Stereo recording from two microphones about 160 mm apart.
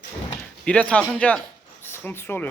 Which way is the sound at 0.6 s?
5° left (ahead or behind).